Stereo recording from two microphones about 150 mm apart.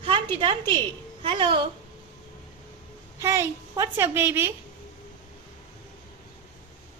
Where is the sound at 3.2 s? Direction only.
20° right (ahead or behind).